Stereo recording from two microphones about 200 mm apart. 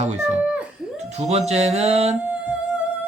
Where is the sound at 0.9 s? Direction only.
35° right (ahead or behind).